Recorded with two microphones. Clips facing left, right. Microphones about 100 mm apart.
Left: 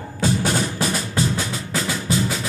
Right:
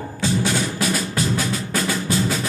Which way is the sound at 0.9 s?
20° left (ahead or behind).